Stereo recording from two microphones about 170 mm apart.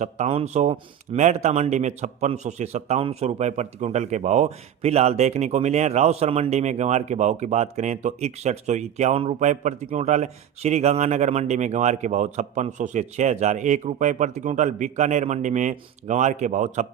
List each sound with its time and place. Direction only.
0.0 s speech: 40° right (ahead or behind)